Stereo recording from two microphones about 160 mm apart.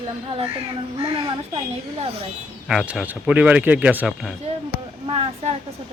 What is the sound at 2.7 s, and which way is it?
Speech, centre (ahead or behind).